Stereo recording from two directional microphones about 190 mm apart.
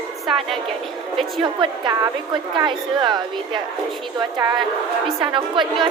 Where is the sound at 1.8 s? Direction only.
25° right (ahead or behind).